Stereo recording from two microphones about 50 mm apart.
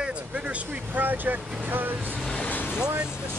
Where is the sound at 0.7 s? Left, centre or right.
Right.